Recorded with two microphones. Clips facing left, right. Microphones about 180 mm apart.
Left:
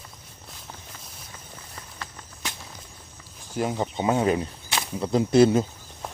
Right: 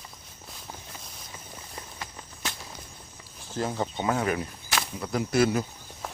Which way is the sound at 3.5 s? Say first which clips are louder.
Left 3 dB; 15° left (ahead or behind).